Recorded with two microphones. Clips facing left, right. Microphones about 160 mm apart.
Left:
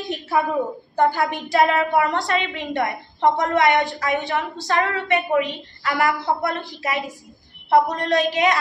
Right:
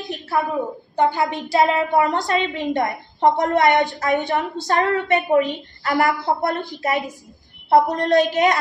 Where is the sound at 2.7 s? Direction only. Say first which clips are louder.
Right 2 dB; 40° right (ahead or behind).